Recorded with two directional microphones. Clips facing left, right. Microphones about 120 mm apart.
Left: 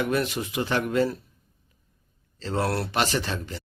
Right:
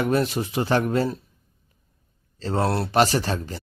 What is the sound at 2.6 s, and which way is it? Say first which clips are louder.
Speech: right 3 dB; 25° right (ahead or behind).